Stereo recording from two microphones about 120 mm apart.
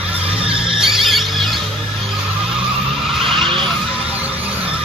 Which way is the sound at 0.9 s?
Centre (ahead or behind).